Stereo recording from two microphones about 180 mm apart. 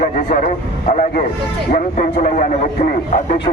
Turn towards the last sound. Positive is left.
turn(degrees=50)  # may be behind; listen again after turning